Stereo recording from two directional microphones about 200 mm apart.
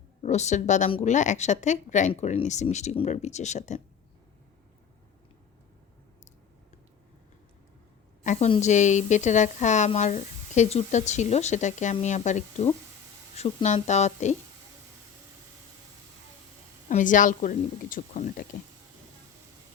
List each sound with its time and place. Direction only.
0.2 s a woman's voice: 35° left (ahead or behind)
8.2 s a woman's voice: 35° left (ahead or behind)
16.9 s a woman's voice: 40° left (ahead or behind)